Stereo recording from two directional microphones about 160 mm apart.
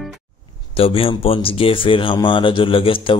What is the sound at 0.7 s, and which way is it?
Speech, 35° left (ahead or behind).